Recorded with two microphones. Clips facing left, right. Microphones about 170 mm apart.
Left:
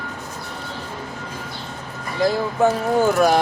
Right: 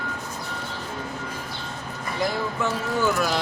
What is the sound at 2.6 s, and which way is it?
Speech, 50° left (ahead or behind).